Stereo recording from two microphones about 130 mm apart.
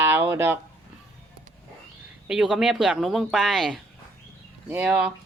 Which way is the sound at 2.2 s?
5° right (ahead or behind).